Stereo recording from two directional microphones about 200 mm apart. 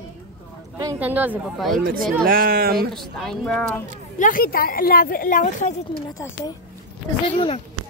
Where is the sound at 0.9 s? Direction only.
10° right (ahead or behind).